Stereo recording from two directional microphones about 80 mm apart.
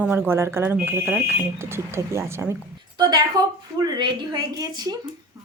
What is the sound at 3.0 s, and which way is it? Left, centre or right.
A woman's voice, right.